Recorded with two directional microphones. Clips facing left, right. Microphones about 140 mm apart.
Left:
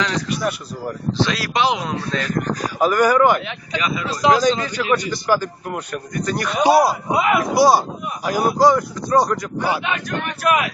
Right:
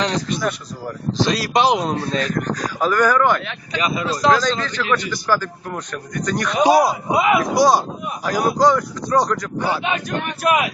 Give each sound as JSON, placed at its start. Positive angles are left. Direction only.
{"t": 0.3, "sound": "a man's voice", "side_deg": 10}
{"t": 1.2, "sound": "speech", "side_deg": -40}
{"t": 2.6, "sound": "a man's voice", "side_deg": 10}
{"t": 3.8, "sound": "speech", "side_deg": -35}
{"t": 4.2, "sound": "a man's voice", "side_deg": 15}
{"t": 7.5, "sound": "a man's voice", "side_deg": 5}
{"t": 10.4, "sound": "speech", "side_deg": -20}